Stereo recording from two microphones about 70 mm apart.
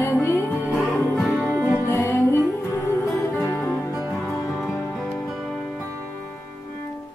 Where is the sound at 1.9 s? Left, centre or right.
Left.